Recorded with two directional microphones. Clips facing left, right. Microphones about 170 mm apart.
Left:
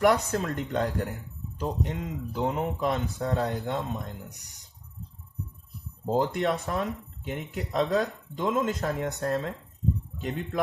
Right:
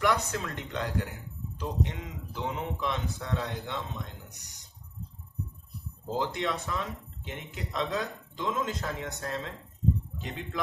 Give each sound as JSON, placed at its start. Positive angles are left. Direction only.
{"t": 0.0, "sound": "speech", "side_deg": 45}
{"t": 6.1, "sound": "speech", "side_deg": 50}